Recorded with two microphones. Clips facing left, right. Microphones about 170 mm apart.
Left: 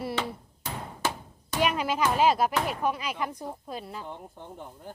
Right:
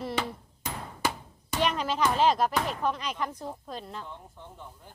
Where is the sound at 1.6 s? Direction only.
10° left (ahead or behind).